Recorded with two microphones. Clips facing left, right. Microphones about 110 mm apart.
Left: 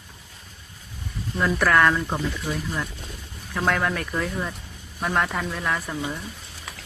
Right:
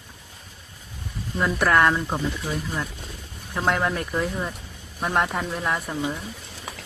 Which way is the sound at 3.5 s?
15° right (ahead or behind).